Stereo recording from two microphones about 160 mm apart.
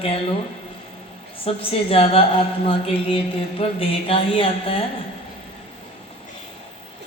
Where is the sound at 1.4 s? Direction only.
35° left (ahead or behind).